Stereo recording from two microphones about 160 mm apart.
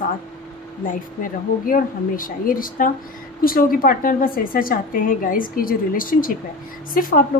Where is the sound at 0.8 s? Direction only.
60° left (ahead or behind).